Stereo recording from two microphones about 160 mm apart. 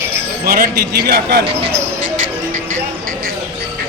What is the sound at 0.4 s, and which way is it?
Speech, 70° right (ahead or behind).